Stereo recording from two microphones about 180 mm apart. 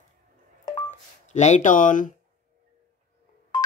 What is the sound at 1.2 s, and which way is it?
Speech, 40° left (ahead or behind).